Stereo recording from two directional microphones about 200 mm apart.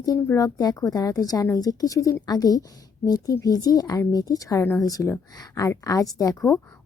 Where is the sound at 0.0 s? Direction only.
15° left (ahead or behind).